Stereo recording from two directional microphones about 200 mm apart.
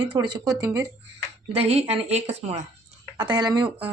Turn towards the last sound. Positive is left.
turn(degrees=-25)  # may be behind; listen again after turning